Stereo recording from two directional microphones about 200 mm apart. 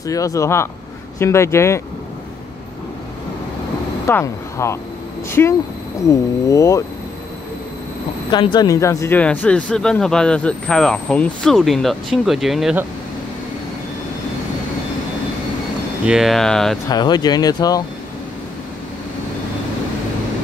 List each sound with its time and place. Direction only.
0.0 s speech: 15° left (ahead or behind)
4.1 s speech: 15° left (ahead or behind)
8.3 s speech: 20° left (ahead or behind); by 12.8 s centre (ahead or behind)
16.1 s speech: centre (ahead or behind)
16.8 s speech: 20° left (ahead or behind)